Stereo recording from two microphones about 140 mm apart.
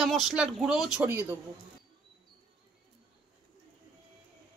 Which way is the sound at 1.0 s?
15° right (ahead or behind).